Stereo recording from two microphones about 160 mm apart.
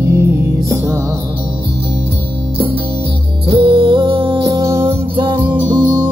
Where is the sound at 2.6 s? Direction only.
35° right (ahead or behind).